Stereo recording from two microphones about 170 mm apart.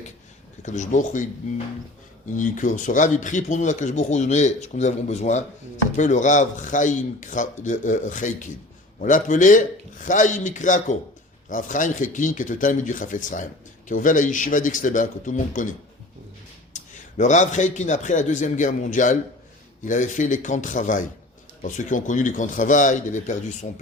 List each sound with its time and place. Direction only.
0.6 s speech: 45° left (ahead or behind)
16.7 s speech: 45° left (ahead or behind)